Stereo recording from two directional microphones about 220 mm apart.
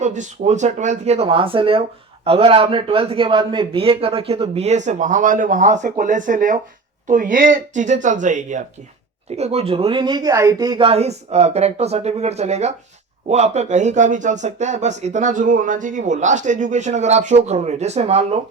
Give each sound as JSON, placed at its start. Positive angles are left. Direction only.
{"t": 0.0, "sound": "a man's voice", "side_deg": -35}